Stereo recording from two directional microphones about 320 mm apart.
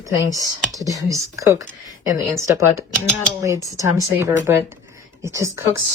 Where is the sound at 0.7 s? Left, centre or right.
Centre.